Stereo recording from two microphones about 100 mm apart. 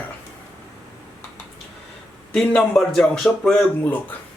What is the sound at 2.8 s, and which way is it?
Speech, 5° left (ahead or behind).